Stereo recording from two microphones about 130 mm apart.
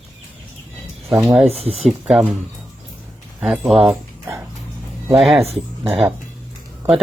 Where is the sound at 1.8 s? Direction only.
5° right (ahead or behind).